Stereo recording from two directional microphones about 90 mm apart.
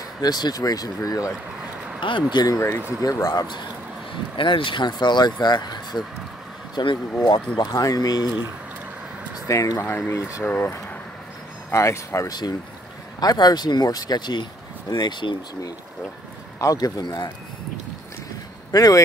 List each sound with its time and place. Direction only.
0.2 s speech: 50° left (ahead or behind)
2.0 s speech: 65° left (ahead or behind)
2.3 s speech: 40° left (ahead or behind)
4.4 s speech: 70° left (ahead or behind); by 6.0 s 50° left (ahead or behind)
6.7 s speech: 65° left (ahead or behind)
7.5 s speech: 45° left (ahead or behind)
9.5 s speech: 35° left (ahead or behind)
12.3 s speech: 50° left (ahead or behind)
16.5 s speech: 40° left (ahead or behind)
18.7 s speech: 40° left (ahead or behind)